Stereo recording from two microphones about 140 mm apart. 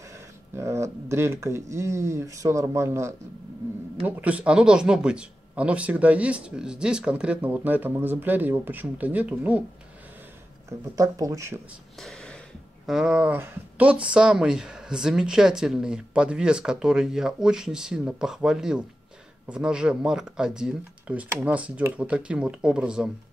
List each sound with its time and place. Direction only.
0.6 s a man's voice: 20° right (ahead or behind)
11.0 s speech: 25° right (ahead or behind)
12.0 s a sound: 5° left (ahead or behind)
12.8 s a man's voice: 5° right (ahead or behind)